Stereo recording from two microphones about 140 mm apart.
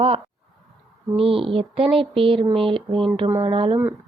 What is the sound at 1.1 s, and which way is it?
Speech, 40° right (ahead or behind).